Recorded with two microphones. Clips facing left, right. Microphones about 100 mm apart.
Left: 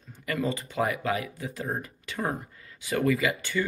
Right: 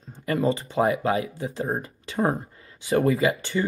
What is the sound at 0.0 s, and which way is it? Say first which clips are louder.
Speech: right 6 dB; 30° right (ahead or behind).